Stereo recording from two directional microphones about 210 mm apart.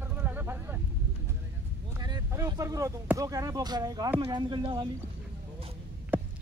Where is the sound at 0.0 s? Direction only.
10° right (ahead or behind).